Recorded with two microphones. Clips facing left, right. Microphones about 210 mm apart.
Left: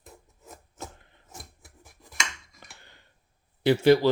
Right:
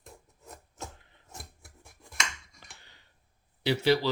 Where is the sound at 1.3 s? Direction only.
Centre (ahead or behind).